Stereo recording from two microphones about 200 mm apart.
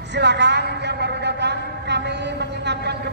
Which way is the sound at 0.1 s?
60° right (ahead or behind).